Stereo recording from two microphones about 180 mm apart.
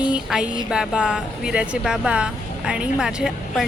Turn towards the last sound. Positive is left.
turn(degrees=-5)  # may be behind; listen again after turning